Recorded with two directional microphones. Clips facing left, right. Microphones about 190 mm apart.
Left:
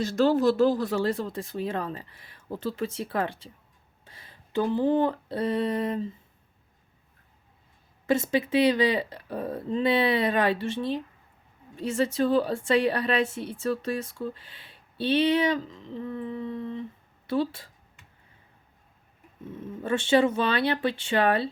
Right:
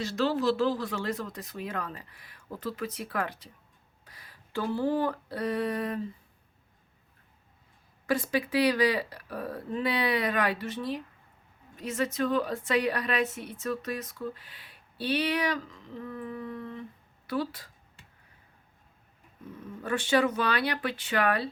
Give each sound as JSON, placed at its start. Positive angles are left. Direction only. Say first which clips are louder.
{"t": 0.0, "sound": "a woman's voice", "louder": "left 5 dB", "side_deg": 45}
{"t": 4.0, "sound": "a sound", "louder": "left 3 dB", "side_deg": 25}
{"t": 8.0, "sound": "a woman's voice", "louder": "left 4 dB", "side_deg": 25}
{"t": 19.5, "sound": "a woman's voice", "louder": "left 4 dB", "side_deg": 25}